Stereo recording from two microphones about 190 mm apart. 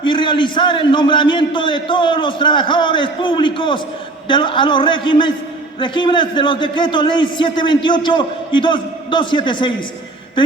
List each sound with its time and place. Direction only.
0.0 s a man's voice: 25° left (ahead or behind)